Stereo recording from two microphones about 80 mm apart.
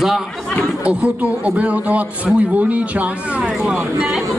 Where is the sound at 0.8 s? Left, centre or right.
Centre.